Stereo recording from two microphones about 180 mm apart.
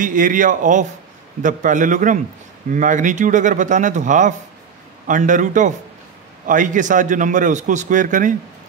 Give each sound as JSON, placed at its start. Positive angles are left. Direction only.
{"t": 0.0, "sound": "a man's voice", "side_deg": -45}